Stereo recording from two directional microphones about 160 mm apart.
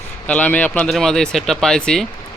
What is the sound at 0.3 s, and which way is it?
Speech, 10° left (ahead or behind).